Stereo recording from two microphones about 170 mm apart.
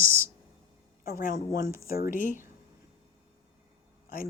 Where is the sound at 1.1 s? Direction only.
55° left (ahead or behind).